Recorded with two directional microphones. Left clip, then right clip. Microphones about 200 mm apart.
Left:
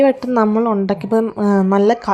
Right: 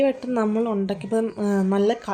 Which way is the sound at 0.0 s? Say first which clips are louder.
Left 8 dB; 20° left (ahead or behind).